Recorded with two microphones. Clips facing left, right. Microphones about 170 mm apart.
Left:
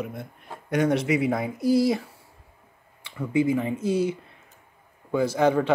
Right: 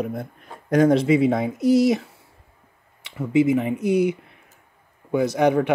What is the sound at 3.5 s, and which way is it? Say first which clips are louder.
Speech: right 4 dB; 20° right (ahead or behind).